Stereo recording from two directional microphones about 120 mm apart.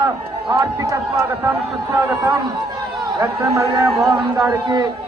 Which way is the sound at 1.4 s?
20° right (ahead or behind).